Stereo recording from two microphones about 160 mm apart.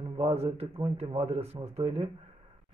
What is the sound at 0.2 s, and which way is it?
Speech, 40° right (ahead or behind).